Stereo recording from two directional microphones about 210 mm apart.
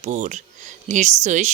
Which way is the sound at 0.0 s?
30° right (ahead or behind).